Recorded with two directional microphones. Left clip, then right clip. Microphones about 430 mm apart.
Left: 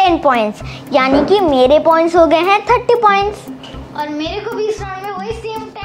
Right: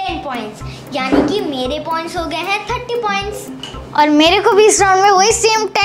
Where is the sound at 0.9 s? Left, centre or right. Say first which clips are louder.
Left 4 dB; left.